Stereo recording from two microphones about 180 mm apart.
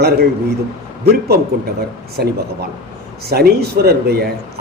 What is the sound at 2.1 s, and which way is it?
A man's voice, 60° right (ahead or behind).